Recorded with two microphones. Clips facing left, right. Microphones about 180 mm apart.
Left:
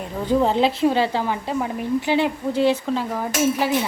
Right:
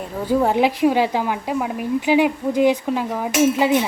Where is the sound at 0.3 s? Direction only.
10° right (ahead or behind).